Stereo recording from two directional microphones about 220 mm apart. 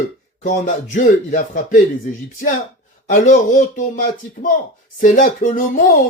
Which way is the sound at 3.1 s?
35° left (ahead or behind).